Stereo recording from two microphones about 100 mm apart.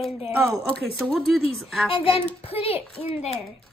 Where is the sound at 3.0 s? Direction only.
90° left.